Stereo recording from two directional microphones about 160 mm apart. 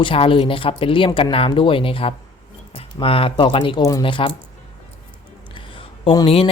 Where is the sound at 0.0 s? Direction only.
35° left (ahead or behind).